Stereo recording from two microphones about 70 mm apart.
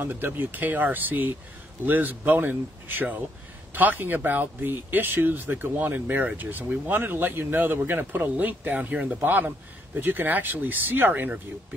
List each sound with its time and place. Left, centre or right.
0.0 s speech: right